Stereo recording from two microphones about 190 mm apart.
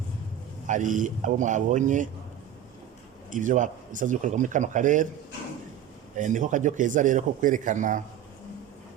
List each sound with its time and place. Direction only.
0.7 s speech: 40° right (ahead or behind)
3.3 s speech: 40° right (ahead or behind)
6.1 s speech: 40° right (ahead or behind)